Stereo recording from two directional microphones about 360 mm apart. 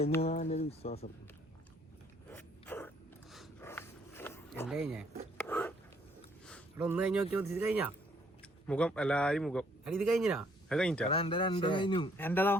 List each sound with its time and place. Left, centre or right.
0.0 s a man's voice: centre
2.3 s a sound: centre
4.8 s speech: centre
5.4 s biting: centre
6.4 s a man's voice: centre
11.1 s a man's voice: centre